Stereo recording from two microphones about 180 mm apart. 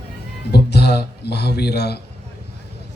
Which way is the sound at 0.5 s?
65° left (ahead or behind).